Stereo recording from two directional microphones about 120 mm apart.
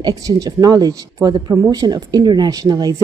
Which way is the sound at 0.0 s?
30° right (ahead or behind).